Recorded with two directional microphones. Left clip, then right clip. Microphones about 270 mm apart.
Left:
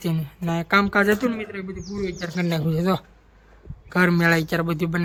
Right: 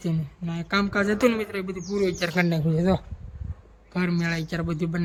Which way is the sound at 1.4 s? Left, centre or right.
Centre.